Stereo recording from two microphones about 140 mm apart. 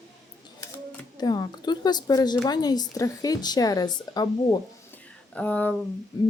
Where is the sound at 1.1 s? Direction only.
30° left (ahead or behind).